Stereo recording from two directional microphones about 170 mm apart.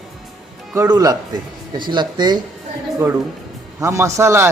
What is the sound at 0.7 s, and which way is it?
Speech, 20° right (ahead or behind).